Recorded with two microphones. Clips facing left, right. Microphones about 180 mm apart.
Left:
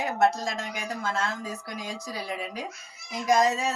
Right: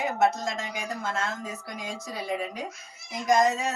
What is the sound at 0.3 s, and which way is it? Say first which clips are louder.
Speech: even; centre (ahead or behind).